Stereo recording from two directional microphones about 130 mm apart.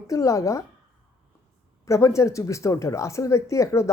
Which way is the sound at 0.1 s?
25° left (ahead or behind).